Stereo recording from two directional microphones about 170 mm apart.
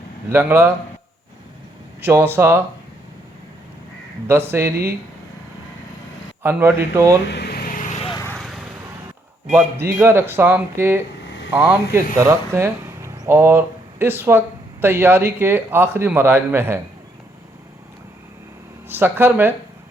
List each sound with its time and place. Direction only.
0.3 s speech: 15° right (ahead or behind)
2.0 s speech: 15° right (ahead or behind)
4.5 s speech: 15° right (ahead or behind)
6.4 s speech: 10° right (ahead or behind)
7.3 s vehicle: 75° left (ahead or behind); by 8.0 s 45° left (ahead or behind)
8.4 s vehicle: centre (ahead or behind)
9.8 s speech: 15° right (ahead or behind)
18.9 s speech: 10° right (ahead or behind)